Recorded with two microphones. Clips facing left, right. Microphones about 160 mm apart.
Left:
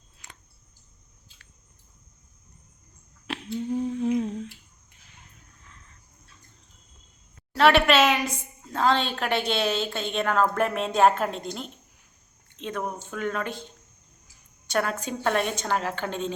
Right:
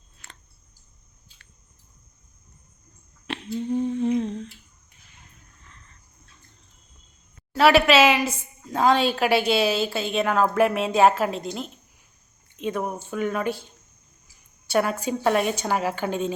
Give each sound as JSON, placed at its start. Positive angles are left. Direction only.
{"t": 0.2, "sound": "a sound", "side_deg": 15}
{"t": 3.2, "sound": "humming", "side_deg": 0}
{"t": 7.5, "sound": "a woman's voice", "side_deg": -5}
{"t": 14.7, "sound": "a woman's voice", "side_deg": -10}